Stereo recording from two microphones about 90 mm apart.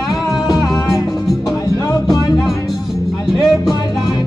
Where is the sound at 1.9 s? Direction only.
45° left (ahead or behind).